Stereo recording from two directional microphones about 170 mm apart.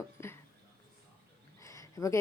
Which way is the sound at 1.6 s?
20° left (ahead or behind).